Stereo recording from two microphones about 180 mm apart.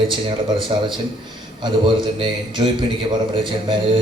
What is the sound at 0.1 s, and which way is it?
A man's voice, 30° right (ahead or behind).